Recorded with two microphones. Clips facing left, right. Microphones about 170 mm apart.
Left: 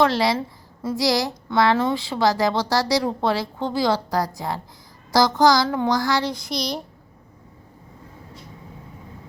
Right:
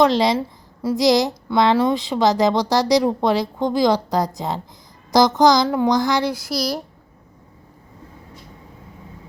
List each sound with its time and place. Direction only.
0.0 s a woman's voice: 20° right (ahead or behind)